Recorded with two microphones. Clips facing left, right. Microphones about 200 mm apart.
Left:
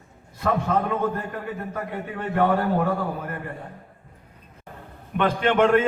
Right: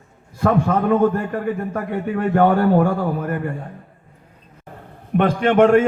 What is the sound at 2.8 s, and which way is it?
Speech, 70° right (ahead or behind).